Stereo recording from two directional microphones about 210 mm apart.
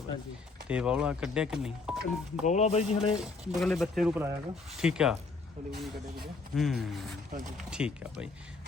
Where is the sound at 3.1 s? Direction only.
5° right (ahead or behind).